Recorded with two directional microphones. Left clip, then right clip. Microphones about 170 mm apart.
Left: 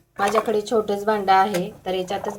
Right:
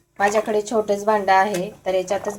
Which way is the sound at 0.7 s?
25° right (ahead or behind).